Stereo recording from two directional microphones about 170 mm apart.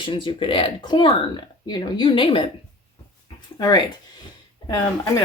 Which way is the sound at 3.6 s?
25° left (ahead or behind).